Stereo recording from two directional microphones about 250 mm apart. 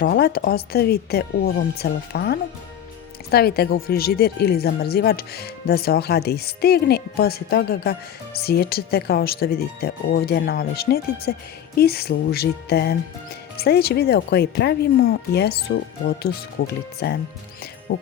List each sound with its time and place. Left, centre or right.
0.0 s speech: left